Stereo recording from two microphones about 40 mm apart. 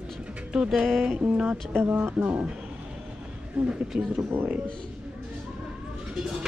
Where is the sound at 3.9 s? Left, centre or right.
Right.